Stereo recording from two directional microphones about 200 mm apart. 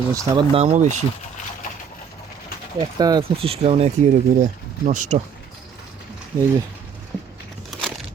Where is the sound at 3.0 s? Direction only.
20° right (ahead or behind); by 5.2 s 35° right (ahead or behind).